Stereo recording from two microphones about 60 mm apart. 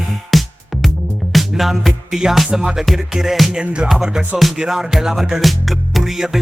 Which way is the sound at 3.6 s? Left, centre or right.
Centre.